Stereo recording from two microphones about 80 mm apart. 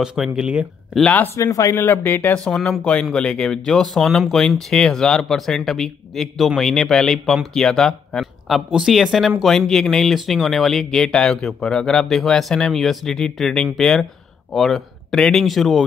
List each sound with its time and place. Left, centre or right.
0.0 s speech: centre
1.0 s speech: left
1.3 s speech: left
1.8 s speech: left
2.3 s speech: centre